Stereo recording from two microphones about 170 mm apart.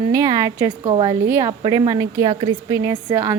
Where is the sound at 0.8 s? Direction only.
30° right (ahead or behind).